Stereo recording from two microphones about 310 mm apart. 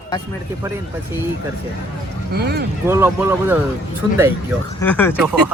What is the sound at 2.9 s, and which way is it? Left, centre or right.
Speech, centre.